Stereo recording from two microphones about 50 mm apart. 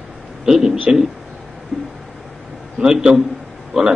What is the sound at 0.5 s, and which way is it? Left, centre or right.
Speech, centre.